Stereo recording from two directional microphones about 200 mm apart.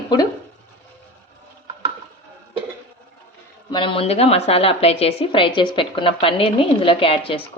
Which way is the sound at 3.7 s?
25° left (ahead or behind).